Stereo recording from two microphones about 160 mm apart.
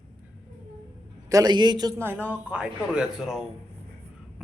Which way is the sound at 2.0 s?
10° right (ahead or behind).